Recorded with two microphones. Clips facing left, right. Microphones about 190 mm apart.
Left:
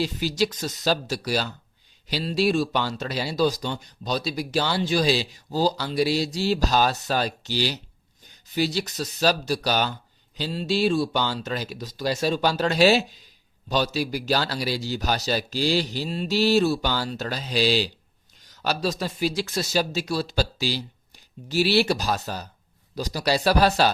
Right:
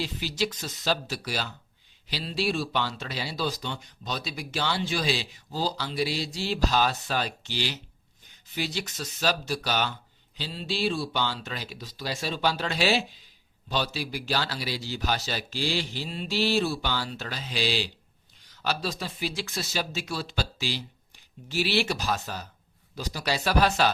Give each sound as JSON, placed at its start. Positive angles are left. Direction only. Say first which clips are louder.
{"t": 0.0, "sound": "speech", "louder": "left 6 dB", "side_deg": 40}